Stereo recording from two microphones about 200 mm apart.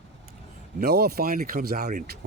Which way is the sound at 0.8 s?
55° right (ahead or behind).